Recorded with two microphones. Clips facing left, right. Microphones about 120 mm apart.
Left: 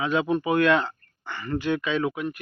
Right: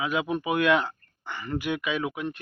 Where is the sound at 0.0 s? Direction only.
10° right (ahead or behind).